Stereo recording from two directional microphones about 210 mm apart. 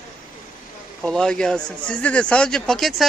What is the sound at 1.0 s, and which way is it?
Speech, 5° left (ahead or behind).